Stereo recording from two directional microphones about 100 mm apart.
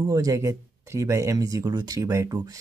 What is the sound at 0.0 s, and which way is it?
Speech, 35° right (ahead or behind).